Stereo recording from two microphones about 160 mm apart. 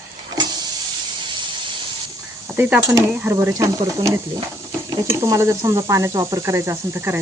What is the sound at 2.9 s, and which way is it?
Speech, 15° right (ahead or behind).